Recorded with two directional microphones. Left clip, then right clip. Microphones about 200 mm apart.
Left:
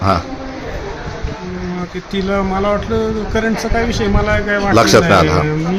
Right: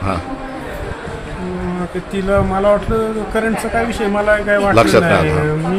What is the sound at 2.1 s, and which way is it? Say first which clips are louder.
A man's voice: right 2 dB; 5° left (ahead or behind).